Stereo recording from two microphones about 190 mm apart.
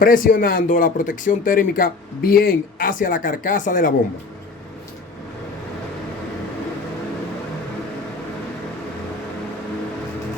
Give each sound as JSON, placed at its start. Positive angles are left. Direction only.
{"t": 0.0, "sound": "speech", "side_deg": 45}